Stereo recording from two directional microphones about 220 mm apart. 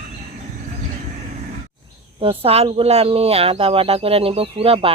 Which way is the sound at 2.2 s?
25° right (ahead or behind).